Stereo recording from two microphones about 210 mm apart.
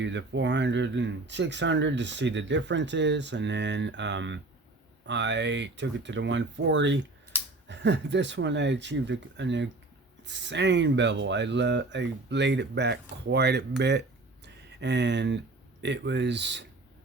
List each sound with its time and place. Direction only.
0.0 s speech: 60° right (ahead or behind)
14.4 s a sound: 55° right (ahead or behind)
15.8 s speech: 55° right (ahead or behind)